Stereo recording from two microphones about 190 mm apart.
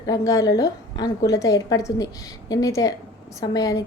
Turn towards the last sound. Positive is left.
turn(degrees=20)  # may be behind; listen again after turning